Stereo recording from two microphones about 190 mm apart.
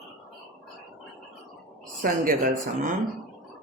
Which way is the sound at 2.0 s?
45° right (ahead or behind).